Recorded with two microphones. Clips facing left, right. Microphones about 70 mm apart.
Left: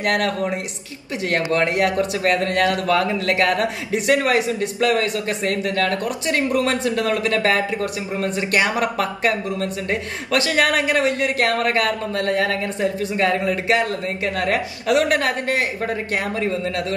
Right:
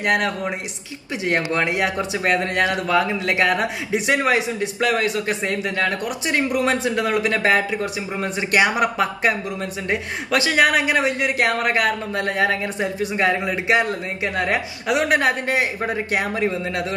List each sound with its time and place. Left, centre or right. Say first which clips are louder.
0.0 s speech: even; right